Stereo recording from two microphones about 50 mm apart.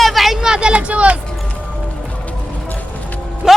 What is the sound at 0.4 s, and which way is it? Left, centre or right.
Vehicle, centre.